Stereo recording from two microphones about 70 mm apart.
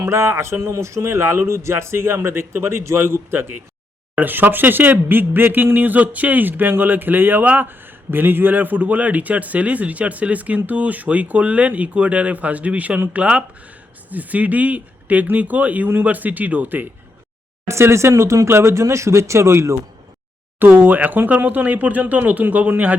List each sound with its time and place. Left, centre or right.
0.0 s speech: right
17.7 s speech: right
20.6 s speech: right